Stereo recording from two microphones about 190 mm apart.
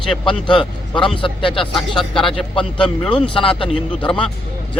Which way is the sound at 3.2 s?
25° left (ahead or behind).